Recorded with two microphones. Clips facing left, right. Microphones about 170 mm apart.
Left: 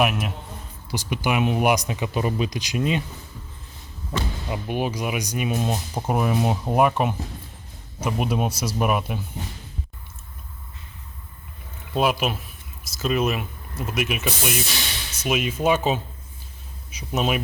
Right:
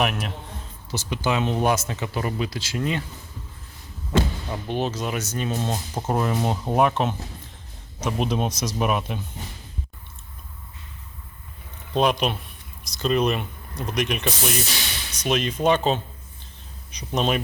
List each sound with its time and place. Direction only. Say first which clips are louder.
0.0 s speech: left 2 dB; 5° left (ahead or behind)
4.4 s speech: even; 10° left (ahead or behind)
11.9 s speech: right 1 dB; 5° left (ahead or behind)